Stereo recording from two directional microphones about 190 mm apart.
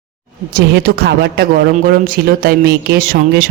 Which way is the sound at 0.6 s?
55° right (ahead or behind).